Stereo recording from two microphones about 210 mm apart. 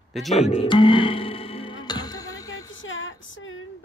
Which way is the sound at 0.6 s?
25° left (ahead or behind).